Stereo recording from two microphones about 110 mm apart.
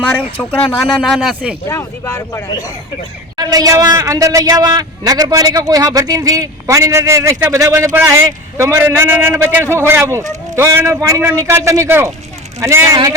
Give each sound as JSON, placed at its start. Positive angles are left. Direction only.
{"t": 0.0, "sound": "speech", "side_deg": 15}
{"t": 0.8, "sound": "a man's voice", "side_deg": 0}
{"t": 1.6, "sound": "speech", "side_deg": 30}
{"t": 3.3, "sound": "a man's voice", "side_deg": -35}